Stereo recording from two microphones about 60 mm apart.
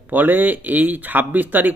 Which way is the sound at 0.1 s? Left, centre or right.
Right.